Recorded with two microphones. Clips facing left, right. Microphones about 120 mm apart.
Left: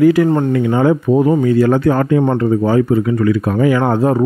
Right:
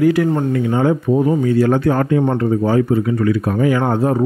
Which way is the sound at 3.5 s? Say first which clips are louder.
Left 2 dB; 90° left.